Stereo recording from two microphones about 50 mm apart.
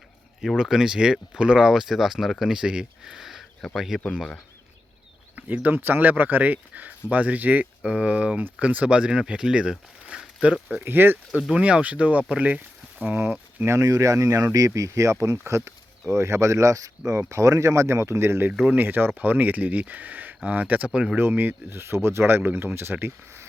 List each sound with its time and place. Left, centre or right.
0.5 s speech: centre
5.5 s speech: right
10.8 s speech: right
11.3 s speech: centre
11.6 s speech: right
13.1 s speech: right
13.7 s speech: right
17.1 s speech: right
18.7 s speech: right
21.2 s speech: right